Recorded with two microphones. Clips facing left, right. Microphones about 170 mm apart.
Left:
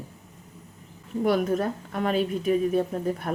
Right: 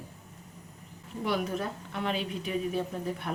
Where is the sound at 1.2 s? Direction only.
50° left (ahead or behind).